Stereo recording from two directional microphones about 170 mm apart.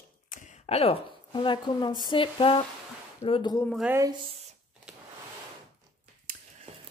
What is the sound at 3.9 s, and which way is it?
Speech, 20° right (ahead or behind).